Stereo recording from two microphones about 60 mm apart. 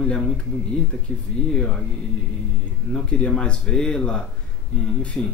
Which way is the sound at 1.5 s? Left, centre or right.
Centre.